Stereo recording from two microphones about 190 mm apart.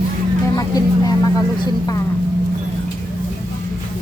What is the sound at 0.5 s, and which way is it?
Vehicle, 20° left (ahead or behind).